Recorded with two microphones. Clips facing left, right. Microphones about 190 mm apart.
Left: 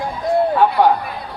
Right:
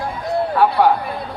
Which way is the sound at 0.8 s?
15° left (ahead or behind).